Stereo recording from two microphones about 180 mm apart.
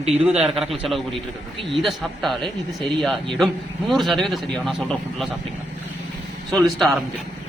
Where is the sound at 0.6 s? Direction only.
Centre (ahead or behind).